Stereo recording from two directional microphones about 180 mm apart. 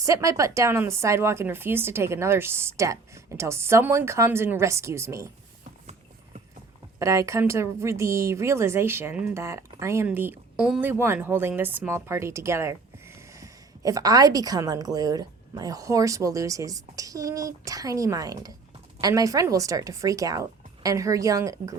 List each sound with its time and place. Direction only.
0.0 s speech: 20° right (ahead or behind)
7.0 s speech: 15° right (ahead or behind)